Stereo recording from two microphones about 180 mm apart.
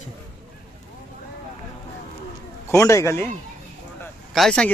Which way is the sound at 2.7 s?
15° left (ahead or behind).